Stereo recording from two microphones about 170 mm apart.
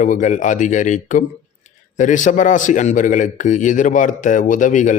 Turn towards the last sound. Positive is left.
turn(degrees=50)  # may be behind; listen again after turning